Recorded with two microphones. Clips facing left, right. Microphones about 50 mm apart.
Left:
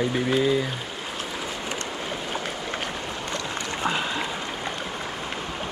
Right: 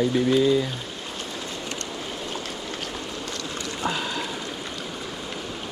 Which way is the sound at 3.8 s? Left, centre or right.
Left.